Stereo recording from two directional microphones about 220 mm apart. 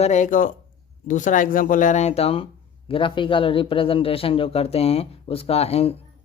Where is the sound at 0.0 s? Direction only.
35° left (ahead or behind).